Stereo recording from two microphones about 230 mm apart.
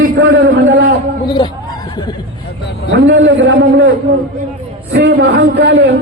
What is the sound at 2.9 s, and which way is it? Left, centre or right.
Speech, right.